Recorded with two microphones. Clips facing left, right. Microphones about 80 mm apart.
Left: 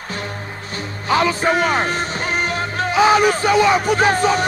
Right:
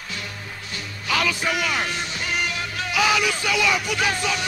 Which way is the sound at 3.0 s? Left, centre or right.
Left.